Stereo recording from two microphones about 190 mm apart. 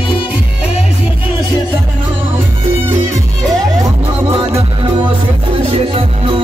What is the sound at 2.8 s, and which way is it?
Music, 15° right (ahead or behind).